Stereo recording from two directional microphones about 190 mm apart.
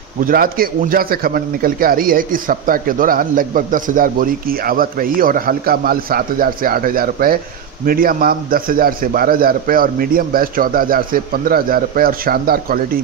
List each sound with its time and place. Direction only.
0.3 s a man's voice: 50° right (ahead or behind)